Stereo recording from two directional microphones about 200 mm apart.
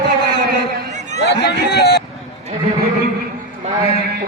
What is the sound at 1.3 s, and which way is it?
Speech, 55° left (ahead or behind).